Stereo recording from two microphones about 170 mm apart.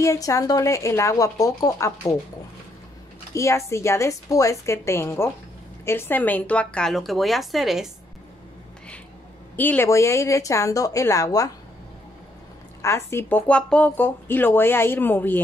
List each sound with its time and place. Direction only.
0.0 s speech: 20° left (ahead or behind)
3.3 s speech: 15° left (ahead or behind); by 7.9 s centre (ahead or behind)
9.6 s speech: 10° left (ahead or behind)
12.8 s speech: 15° left (ahead or behind)